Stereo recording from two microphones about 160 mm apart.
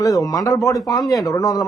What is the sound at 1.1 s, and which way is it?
Speech, 20° left (ahead or behind).